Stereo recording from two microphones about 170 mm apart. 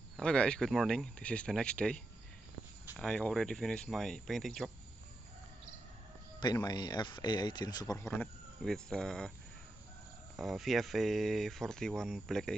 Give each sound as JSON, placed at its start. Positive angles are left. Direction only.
{"t": 0.2, "sound": "speech", "side_deg": 5}
{"t": 3.0, "sound": "speech", "side_deg": 5}
{"t": 6.4, "sound": "speech", "side_deg": 25}
{"t": 10.3, "sound": "speech", "side_deg": 0}